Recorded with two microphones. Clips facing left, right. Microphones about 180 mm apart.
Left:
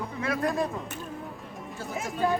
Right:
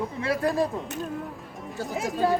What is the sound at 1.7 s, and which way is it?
Speech, 40° right (ahead or behind).